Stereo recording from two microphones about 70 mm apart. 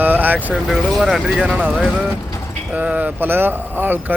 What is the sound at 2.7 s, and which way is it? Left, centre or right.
Speech, right.